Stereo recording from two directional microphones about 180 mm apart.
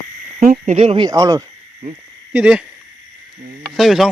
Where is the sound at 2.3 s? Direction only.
5° right (ahead or behind).